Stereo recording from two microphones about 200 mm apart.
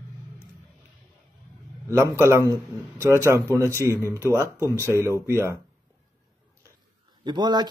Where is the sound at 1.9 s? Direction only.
15° right (ahead or behind).